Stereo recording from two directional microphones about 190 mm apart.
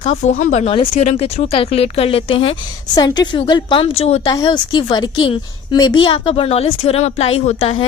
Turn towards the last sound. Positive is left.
turn(degrees=35)  # may be behind; listen again after turning